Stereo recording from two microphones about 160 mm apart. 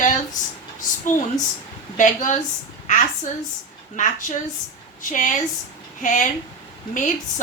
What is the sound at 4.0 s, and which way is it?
A woman's voice, 50° left (ahead or behind).